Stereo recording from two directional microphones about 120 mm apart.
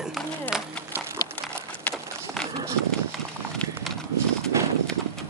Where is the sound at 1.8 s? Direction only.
5° left (ahead or behind).